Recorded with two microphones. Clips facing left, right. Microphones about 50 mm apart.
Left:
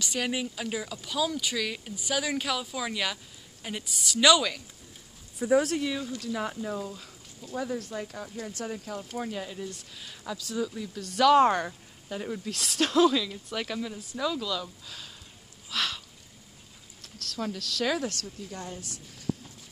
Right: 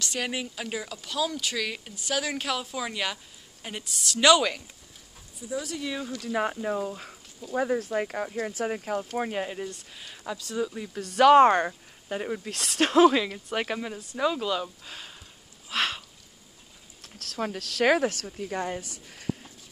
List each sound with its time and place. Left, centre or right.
0.0 s speech: centre
3.9 s speech: centre
4.3 s speech: centre
5.4 s speech: left
6.2 s speech: right
7.5 s speech: right
9.9 s speech: centre
15.7 s a sound: right
17.4 s speech: right